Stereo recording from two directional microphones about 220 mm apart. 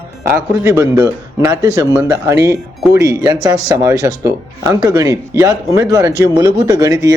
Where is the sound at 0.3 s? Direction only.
10° right (ahead or behind).